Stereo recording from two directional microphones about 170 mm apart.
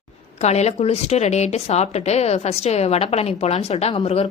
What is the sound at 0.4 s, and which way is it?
A woman's voice, 40° left (ahead or behind).